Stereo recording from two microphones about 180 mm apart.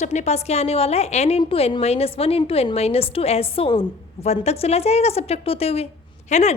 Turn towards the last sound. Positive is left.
turn(degrees=40)  # may be behind; listen again after turning